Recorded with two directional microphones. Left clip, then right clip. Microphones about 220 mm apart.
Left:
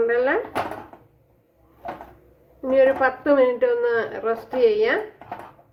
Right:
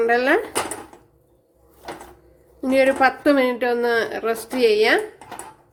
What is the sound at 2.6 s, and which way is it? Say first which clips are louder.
A woman's voice: right 1 dB; 45° right (ahead or behind).